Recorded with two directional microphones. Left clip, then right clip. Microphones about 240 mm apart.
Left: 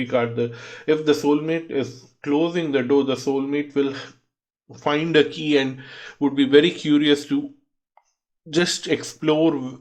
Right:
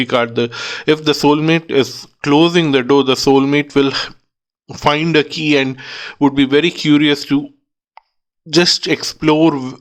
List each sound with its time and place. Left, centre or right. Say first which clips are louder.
0.0 s speech: right 7 dB; right
8.0 s plop: right 14 dB; right
8.4 s speech: right 8 dB; right